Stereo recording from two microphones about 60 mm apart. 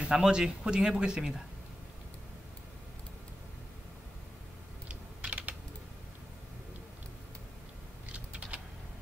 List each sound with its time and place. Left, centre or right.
0.0 s speech: centre
4.8 s typing: right